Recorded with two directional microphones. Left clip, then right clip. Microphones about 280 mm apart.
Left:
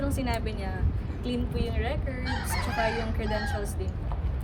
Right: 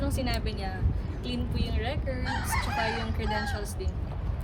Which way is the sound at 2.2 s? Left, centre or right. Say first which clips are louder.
Right 1 dB; centre.